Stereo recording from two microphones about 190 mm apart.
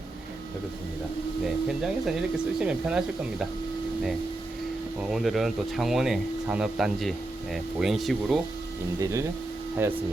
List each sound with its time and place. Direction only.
1.6 s speech: centre (ahead or behind)
5.0 s speech: centre (ahead or behind)
9.0 s speech: 15° right (ahead or behind)